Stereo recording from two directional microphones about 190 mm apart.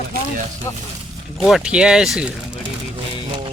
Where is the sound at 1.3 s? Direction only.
Centre (ahead or behind).